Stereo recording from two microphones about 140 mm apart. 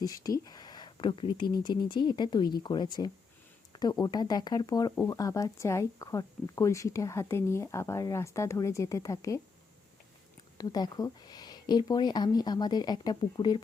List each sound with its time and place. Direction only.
0.0 s speech: 25° left (ahead or behind)
10.6 s speech: 30° left (ahead or behind)